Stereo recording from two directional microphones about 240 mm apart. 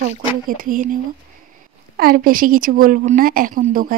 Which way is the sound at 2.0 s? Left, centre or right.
Right.